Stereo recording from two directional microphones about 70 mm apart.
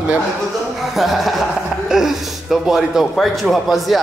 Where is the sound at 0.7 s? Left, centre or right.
Centre.